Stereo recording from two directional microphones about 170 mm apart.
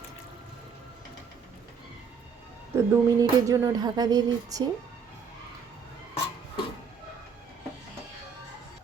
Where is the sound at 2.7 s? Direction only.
15° right (ahead or behind).